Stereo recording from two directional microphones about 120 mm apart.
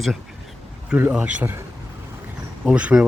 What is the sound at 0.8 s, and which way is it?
Speech, 10° right (ahead or behind).